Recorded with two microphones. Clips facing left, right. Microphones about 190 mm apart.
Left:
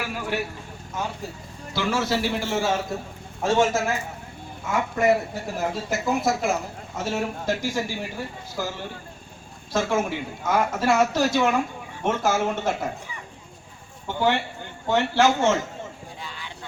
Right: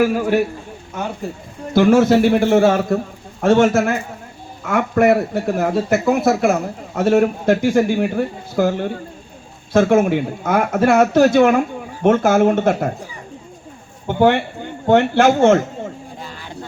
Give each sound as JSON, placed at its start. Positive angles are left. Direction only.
{"t": 0.0, "sound": "a man's voice", "side_deg": -45}
{"t": 14.1, "sound": "speech", "side_deg": -55}
{"t": 16.2, "sound": "vehicle", "side_deg": -45}